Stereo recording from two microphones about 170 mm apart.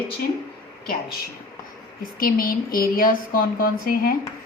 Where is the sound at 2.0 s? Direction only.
55° left (ahead or behind).